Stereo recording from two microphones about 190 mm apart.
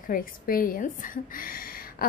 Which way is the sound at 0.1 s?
50° left (ahead or behind).